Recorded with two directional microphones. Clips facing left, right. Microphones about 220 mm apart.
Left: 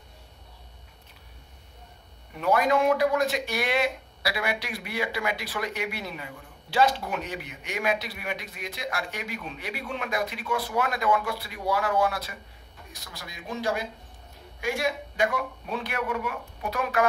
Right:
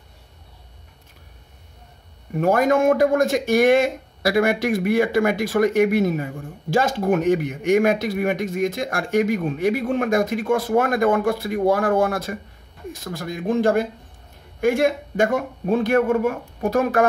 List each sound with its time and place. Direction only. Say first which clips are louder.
2.3 s speech: right 6 dB; 45° right (ahead or behind)